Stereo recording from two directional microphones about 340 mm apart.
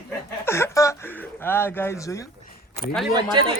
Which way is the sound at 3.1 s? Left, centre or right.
Centre.